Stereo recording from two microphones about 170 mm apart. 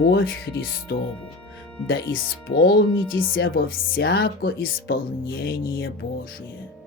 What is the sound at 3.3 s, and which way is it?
Speech, 60° left (ahead or behind).